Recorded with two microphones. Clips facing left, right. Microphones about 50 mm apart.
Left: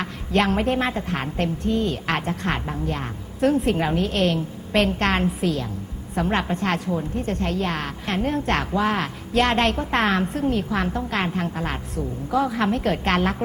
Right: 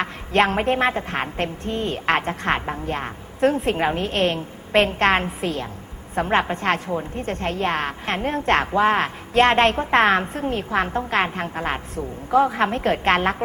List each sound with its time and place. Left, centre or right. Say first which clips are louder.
0.0 s a woman's voice: right 3 dB; right